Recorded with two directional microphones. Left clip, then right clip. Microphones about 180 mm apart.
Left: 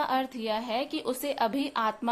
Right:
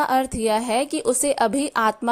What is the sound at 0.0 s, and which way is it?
A woman's voice, 40° right (ahead or behind).